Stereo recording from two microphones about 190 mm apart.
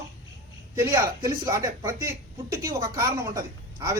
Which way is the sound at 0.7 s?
15° right (ahead or behind).